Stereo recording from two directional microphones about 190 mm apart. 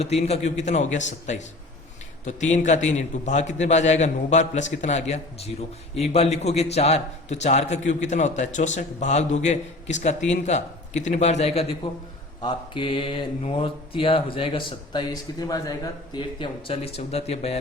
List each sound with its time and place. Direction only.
0.0 s a man's voice: 35° left (ahead or behind)